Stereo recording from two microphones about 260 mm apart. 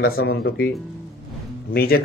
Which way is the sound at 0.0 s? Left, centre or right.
Left.